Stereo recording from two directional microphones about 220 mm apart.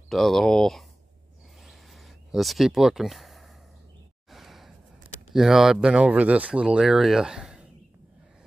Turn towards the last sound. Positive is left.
turn(degrees=-5)  # may be behind; listen again after turning